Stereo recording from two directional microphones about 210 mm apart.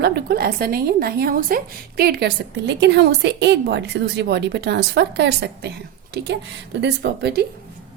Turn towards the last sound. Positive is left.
turn(degrees=-50)  # may be behind; listen again after turning